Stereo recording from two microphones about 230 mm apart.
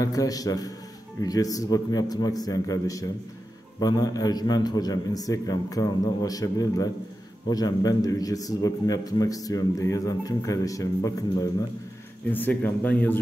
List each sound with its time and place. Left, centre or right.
0.0 s a man's voice: centre